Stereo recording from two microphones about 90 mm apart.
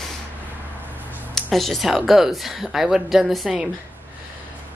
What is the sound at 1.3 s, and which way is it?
A woman's voice, centre (ahead or behind).